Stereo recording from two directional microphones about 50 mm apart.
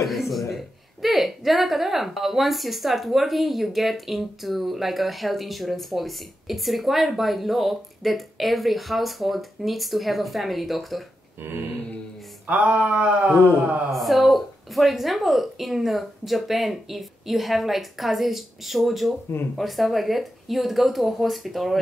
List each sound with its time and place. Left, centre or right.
0.0 s a woman's voice: centre
12.4 s a sound: right
13.9 s a woman's voice: centre